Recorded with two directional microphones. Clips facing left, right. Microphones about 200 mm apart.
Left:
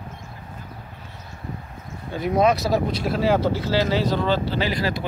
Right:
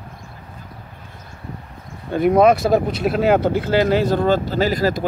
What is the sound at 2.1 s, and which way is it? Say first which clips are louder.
Speech: right 6 dB; 55° right (ahead or behind).